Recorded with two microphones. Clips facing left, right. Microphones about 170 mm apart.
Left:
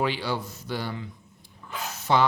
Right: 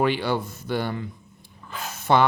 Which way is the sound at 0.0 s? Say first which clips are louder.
Right 5 dB; 55° right (ahead or behind).